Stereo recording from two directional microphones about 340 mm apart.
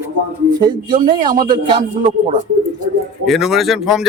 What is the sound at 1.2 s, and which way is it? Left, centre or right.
Speech, centre.